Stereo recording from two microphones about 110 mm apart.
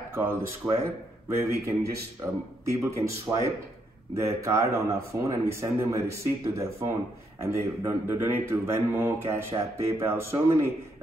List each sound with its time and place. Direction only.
0.1 s speech: 20° right (ahead or behind)
2.6 s speech: 25° right (ahead or behind)